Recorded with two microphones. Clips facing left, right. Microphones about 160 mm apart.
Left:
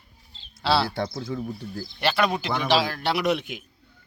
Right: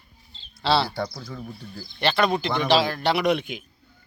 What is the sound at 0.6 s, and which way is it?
Speech, 5° left (ahead or behind).